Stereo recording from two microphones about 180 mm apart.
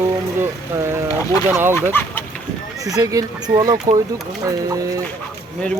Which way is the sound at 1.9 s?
10° left (ahead or behind).